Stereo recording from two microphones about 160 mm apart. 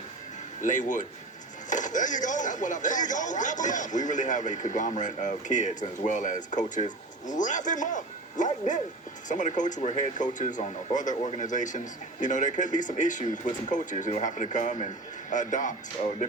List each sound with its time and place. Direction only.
0.6 s speech: 50° left (ahead or behind)